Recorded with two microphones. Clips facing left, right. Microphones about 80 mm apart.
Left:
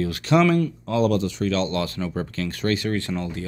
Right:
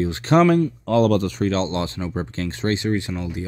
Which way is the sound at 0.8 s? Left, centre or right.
Right.